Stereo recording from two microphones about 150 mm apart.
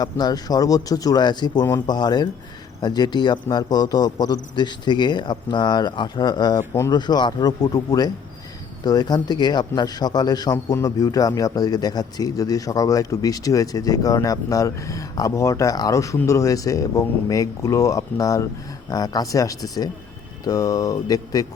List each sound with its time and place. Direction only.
0.0 s speech: 25° left (ahead or behind)